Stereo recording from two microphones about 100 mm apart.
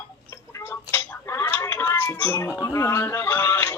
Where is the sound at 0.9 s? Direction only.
25° left (ahead or behind).